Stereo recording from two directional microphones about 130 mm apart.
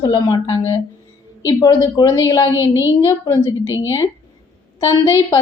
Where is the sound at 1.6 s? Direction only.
30° left (ahead or behind).